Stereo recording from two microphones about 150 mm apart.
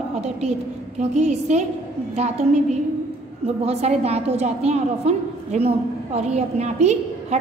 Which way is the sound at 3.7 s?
45° right (ahead or behind).